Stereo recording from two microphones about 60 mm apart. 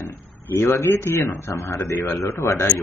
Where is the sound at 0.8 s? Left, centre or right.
Left.